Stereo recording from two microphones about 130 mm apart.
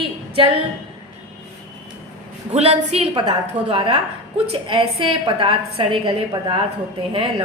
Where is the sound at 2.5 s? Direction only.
50° right (ahead or behind).